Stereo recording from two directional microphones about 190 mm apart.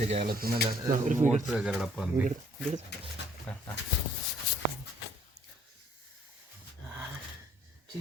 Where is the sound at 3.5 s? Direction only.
5° left (ahead or behind).